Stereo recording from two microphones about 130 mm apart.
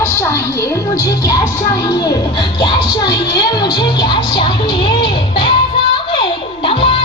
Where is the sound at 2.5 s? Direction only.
35° left (ahead or behind).